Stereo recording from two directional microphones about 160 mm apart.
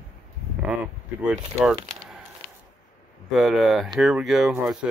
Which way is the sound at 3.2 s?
5° right (ahead or behind).